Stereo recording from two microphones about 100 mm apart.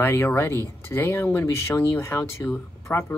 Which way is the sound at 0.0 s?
25° left (ahead or behind).